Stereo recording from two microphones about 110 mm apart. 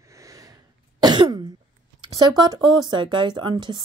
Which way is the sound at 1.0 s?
40° right (ahead or behind).